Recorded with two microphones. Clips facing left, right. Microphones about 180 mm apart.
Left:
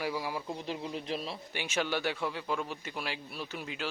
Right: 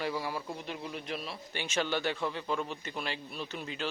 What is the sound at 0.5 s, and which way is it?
Speech, 30° left (ahead or behind).